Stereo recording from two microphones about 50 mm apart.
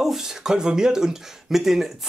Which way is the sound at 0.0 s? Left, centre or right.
Centre.